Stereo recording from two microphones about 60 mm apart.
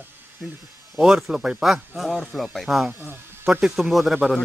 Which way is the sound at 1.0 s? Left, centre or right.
Centre.